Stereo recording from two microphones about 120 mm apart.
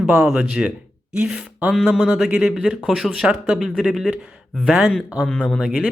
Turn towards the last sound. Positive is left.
turn(degrees=5)  # may be behind; listen again after turning